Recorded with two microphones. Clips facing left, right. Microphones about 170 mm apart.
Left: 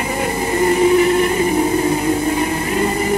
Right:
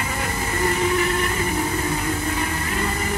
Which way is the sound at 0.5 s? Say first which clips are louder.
Left 9 dB; 20° left (ahead or behind).